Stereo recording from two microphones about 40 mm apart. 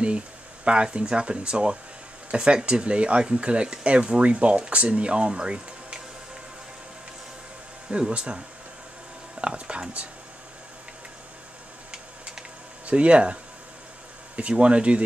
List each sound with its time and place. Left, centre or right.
0.7 s speech: right
8.1 s speech: right
9.4 s speech: right
12.8 s speech: right